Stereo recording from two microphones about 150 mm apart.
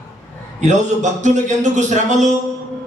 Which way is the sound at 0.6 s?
55° right (ahead or behind).